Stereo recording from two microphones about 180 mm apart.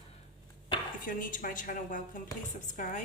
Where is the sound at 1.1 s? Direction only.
50° left (ahead or behind).